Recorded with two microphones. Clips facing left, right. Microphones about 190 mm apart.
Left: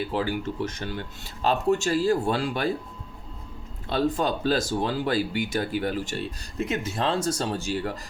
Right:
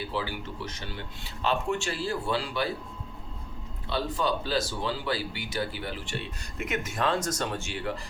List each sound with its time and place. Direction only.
0.1 s speech: 50° left (ahead or behind)
3.8 s speech: 50° left (ahead or behind)